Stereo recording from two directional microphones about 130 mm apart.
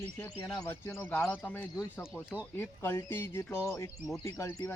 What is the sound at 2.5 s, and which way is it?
Speech, 15° left (ahead or behind).